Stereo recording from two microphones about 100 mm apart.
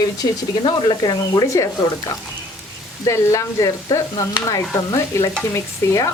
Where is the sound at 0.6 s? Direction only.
55° left (ahead or behind); by 1.7 s 35° left (ahead or behind).